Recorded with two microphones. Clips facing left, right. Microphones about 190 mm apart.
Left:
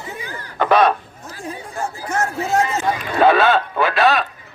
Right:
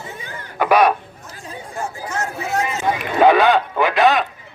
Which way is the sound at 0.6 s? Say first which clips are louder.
Even; 10° right (ahead or behind).